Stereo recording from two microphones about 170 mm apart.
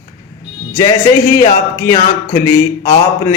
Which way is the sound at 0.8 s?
20° left (ahead or behind).